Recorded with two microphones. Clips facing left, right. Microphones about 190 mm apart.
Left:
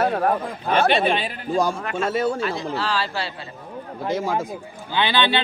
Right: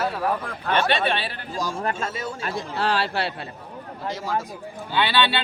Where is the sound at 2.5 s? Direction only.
50° right (ahead or behind).